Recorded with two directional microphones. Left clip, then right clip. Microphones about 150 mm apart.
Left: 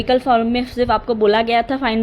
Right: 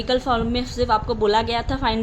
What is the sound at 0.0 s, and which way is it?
A woman's voice, 35° left (ahead or behind).